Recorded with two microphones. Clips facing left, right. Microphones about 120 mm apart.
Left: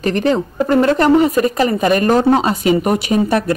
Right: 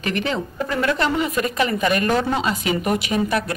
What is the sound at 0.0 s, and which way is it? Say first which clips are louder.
Speech: left 8 dB; 40° left (ahead or behind).